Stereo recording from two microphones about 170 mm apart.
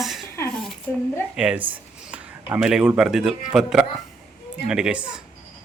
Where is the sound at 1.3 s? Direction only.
5° right (ahead or behind).